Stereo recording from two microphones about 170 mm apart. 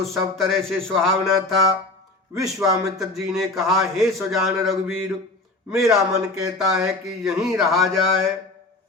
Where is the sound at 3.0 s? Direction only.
Centre (ahead or behind).